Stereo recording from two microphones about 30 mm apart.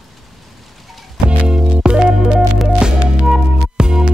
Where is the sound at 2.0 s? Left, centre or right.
Right.